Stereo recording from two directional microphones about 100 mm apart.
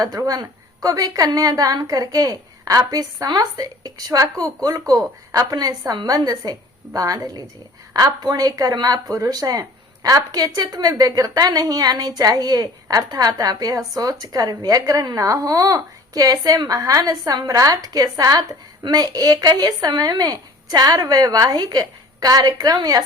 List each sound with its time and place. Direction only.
0.0 s speech: 35° right (ahead or behind)